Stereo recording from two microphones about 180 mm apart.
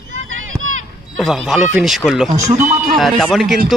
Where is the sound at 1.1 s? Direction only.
Centre (ahead or behind).